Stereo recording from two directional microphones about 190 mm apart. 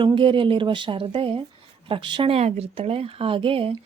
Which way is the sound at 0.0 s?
25° right (ahead or behind).